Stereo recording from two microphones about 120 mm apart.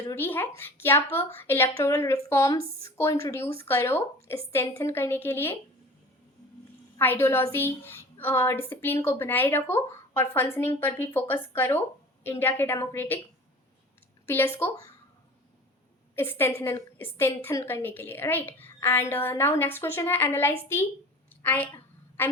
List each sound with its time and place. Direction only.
0.1 s a woman's voice: 15° left (ahead or behind)
7.0 s a woman's voice: 20° left (ahead or behind)
14.3 s a woman's voice: 20° left (ahead or behind)
16.1 s a woman's voice: 20° left (ahead or behind)
22.2 s a sound: 15° left (ahead or behind)